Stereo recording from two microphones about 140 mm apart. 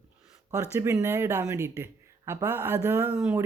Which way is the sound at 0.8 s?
20° right (ahead or behind).